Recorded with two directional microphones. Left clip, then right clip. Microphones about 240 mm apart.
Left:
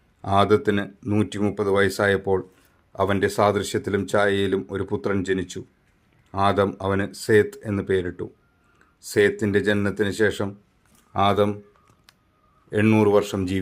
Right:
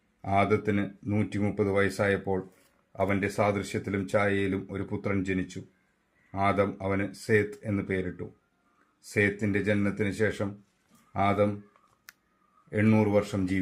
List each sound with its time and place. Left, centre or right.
0.2 s speech: left
12.7 s speech: left